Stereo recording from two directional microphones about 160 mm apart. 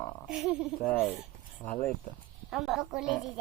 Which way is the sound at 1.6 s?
10° left (ahead or behind).